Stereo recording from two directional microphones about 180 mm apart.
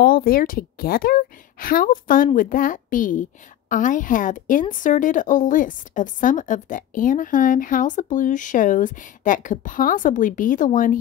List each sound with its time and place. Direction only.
0.0 s a woman's voice: 55° left (ahead or behind)